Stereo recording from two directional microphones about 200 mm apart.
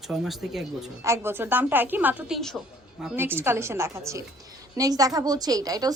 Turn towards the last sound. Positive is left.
turn(degrees=-20)  # may be behind; listen again after turning